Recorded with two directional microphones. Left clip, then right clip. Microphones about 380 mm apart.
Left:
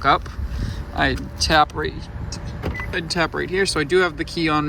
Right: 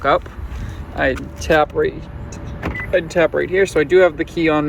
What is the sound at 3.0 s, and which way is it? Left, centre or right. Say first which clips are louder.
Speech: right 5 dB; centre.